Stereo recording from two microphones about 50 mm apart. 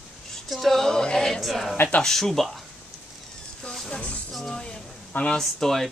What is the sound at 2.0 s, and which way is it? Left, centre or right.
Speech, centre.